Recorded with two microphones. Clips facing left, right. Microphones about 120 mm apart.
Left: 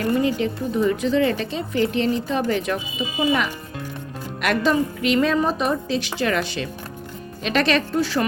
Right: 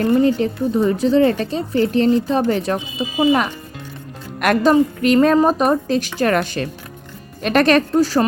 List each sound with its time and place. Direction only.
0.0 s speech: 40° right (ahead or behind)
4.4 s a woman's voice: 50° right (ahead or behind)